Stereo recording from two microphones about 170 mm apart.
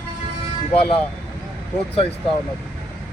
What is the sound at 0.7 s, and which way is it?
Speech, 35° left (ahead or behind).